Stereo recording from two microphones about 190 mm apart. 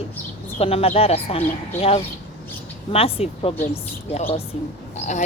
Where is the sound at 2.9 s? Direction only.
30° left (ahead or behind).